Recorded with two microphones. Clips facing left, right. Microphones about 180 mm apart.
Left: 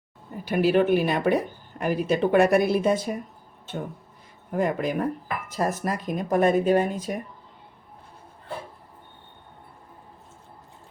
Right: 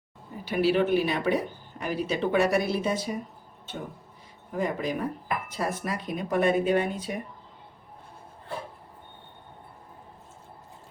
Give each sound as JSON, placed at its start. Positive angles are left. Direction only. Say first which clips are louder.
{"t": 0.4, "sound": "speech", "louder": "left 3 dB", "side_deg": 50}
{"t": 4.5, "sound": "speech", "louder": "left 4 dB", "side_deg": 55}
{"t": 5.5, "sound": "speech", "louder": "left 7 dB", "side_deg": 45}